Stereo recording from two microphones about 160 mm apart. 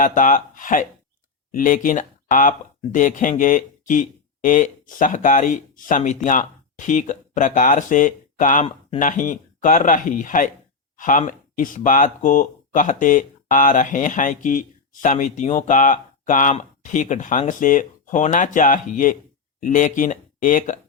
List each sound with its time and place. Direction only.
0.0 s speech: 55° left (ahead or behind)